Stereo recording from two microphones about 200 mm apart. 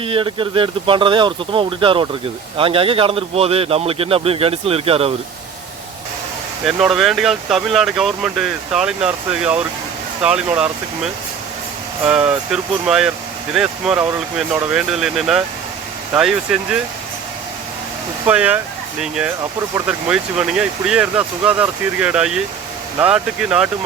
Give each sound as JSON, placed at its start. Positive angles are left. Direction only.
{"t": 0.0, "sound": "a man's voice", "side_deg": -25}
{"t": 6.7, "sound": "speech", "side_deg": 0}
{"t": 18.3, "sound": "speech", "side_deg": -10}